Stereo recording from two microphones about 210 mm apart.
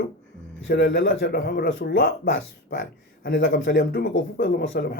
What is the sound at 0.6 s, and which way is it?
Speech, 60° left (ahead or behind).